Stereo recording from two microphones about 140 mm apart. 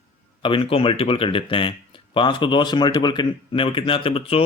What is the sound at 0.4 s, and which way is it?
Speech, 40° left (ahead or behind).